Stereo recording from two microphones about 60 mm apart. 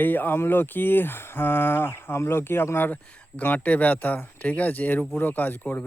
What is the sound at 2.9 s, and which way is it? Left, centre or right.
Speech, left.